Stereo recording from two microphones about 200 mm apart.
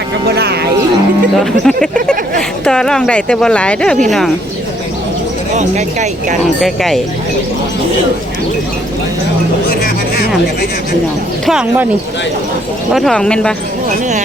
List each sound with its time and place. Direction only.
0.3 s a sound: 55° right (ahead or behind)
1.4 s speech: centre (ahead or behind)
5.5 s speech: 35° right (ahead or behind)
6.6 s speech: centre (ahead or behind)
11.4 s speech: 5° right (ahead or behind)
12.9 s speech: centre (ahead or behind)